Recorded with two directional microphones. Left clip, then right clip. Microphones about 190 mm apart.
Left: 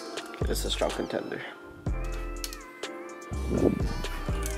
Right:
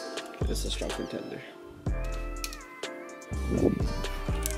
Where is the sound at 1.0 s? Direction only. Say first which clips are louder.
Left 4 dB; 20° left (ahead or behind).